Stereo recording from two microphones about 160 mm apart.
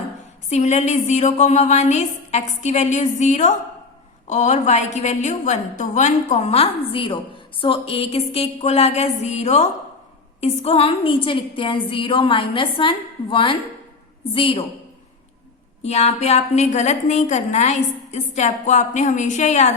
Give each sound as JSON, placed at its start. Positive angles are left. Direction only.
{"t": 0.5, "sound": "a woman's voice", "side_deg": 45}
{"t": 15.8, "sound": "a woman's voice", "side_deg": 45}